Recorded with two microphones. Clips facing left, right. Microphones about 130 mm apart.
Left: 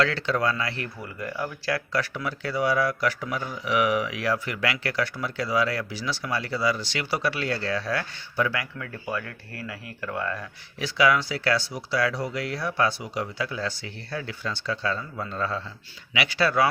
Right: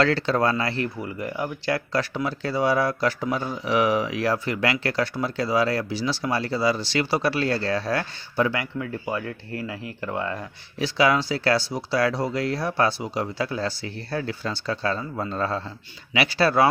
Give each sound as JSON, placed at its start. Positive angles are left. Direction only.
{"t": 0.0, "sound": "speech", "side_deg": -35}